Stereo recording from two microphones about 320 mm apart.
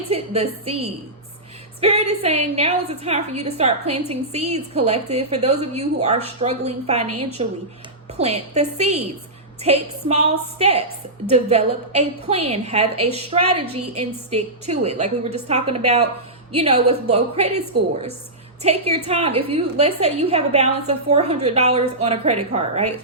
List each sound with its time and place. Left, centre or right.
0.1 s a woman's voice: centre
18.6 s a woman's voice: centre